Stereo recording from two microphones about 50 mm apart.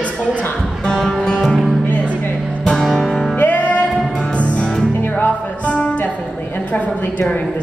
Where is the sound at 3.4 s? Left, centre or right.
Left.